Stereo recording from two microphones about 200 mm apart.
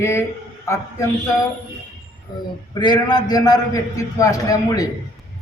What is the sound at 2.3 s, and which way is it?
A man's voice, 20° left (ahead or behind).